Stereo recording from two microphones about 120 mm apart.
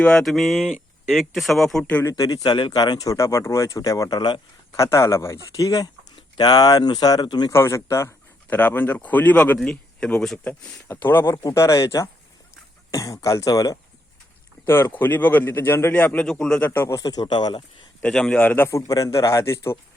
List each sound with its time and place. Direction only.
0.0 s speech: 5° left (ahead or behind)
2.1 s speech: 30° left (ahead or behind)
4.8 s a man's voice: 25° left (ahead or behind)
7.5 s a man's voice: 20° left (ahead or behind)
14.6 s speech: 20° left (ahead or behind)
16.6 s speech: 20° left (ahead or behind); by 17.6 s 40° left (ahead or behind)
18.0 s a man's voice: 5° left (ahead or behind); by 19.8 s 20° left (ahead or behind)